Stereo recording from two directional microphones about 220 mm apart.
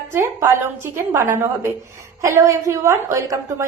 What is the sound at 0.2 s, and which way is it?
Speech, 10° right (ahead or behind).